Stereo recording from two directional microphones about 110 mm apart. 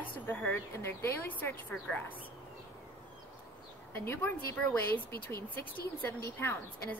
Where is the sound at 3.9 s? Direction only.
20° left (ahead or behind).